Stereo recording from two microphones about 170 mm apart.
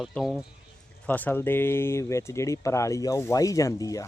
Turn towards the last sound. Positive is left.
turn(degrees=20)  # may be behind; listen again after turning